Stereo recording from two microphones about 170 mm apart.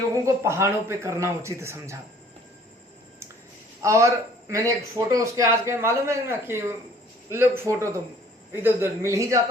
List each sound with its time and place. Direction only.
0.1 s speech: 20° right (ahead or behind)
3.8 s a man's voice: 15° right (ahead or behind)